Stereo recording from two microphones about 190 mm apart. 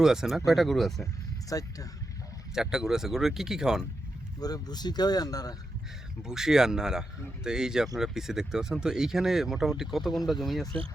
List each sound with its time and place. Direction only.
0.0 s speech: centre (ahead or behind)
1.5 s speech: 20° left (ahead or behind)
2.6 s speech: 5° right (ahead or behind)
4.4 s speech: 20° left (ahead or behind)
6.2 s speech: centre (ahead or behind)